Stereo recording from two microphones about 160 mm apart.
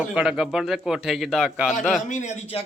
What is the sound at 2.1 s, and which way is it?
Speech, 50° left (ahead or behind).